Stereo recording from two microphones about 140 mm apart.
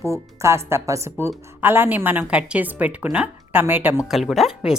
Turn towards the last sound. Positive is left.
turn(degrees=-5)  # may be behind; listen again after turning